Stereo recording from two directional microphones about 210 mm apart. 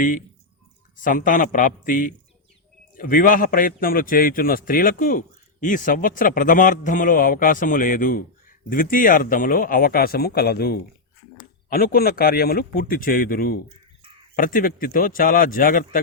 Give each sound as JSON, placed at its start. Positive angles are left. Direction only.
{"t": 1.0, "sound": "a man's voice", "side_deg": 40}